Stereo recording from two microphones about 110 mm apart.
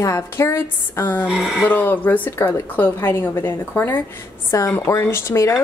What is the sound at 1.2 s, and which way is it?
Speech, centre (ahead or behind).